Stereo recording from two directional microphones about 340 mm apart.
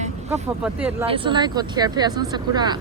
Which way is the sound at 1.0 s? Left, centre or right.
Centre.